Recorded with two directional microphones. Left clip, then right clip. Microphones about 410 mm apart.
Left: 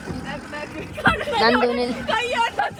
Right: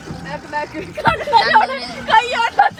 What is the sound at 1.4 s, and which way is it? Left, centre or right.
Speech, centre.